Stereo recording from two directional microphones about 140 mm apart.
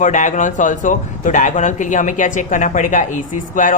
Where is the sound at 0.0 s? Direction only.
60° left (ahead or behind).